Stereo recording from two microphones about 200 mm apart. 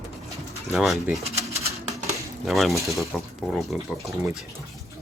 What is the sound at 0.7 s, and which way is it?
Speech, centre (ahead or behind).